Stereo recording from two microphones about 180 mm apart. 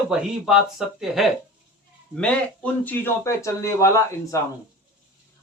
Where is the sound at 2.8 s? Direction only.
10° left (ahead or behind).